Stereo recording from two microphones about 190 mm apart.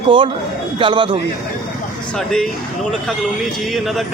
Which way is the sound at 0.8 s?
25° right (ahead or behind).